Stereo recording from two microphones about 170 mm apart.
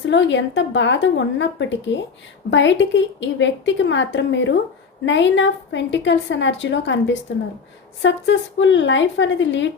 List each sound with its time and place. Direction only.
0.0 s a woman's voice: 90° left